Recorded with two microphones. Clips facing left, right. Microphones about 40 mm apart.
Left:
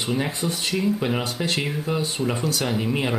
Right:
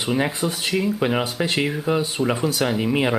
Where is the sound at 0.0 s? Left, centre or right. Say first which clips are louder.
Right 3 dB; centre.